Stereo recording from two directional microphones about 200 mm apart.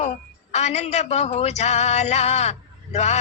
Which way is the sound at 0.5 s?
35° left (ahead or behind).